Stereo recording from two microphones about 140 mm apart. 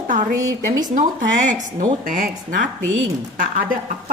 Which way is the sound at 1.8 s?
75° right (ahead or behind).